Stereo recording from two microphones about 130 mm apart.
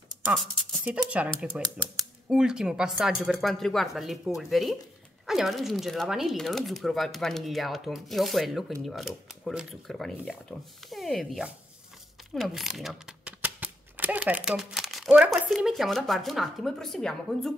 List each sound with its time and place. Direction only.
0.2 s speech: 5° right (ahead or behind)
13.4 s speech: 15° right (ahead or behind); by 17.6 s 5° left (ahead or behind)